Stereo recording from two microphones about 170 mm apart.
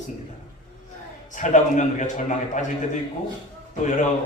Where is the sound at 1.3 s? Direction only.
45° left (ahead or behind).